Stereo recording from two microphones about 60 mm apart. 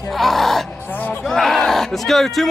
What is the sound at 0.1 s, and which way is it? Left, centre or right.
Speech, centre.